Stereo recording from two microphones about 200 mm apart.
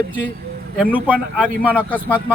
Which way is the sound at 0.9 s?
10° right (ahead or behind).